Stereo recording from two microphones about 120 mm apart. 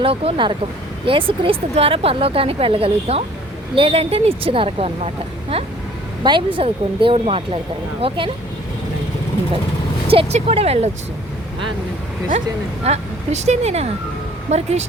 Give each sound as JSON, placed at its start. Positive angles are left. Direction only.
{"t": 0.0, "sound": "speech", "side_deg": -50}
{"t": 6.2, "sound": "speech", "side_deg": -45}
{"t": 10.3, "sound": "speech", "side_deg": -60}
{"t": 12.8, "sound": "speech", "side_deg": -65}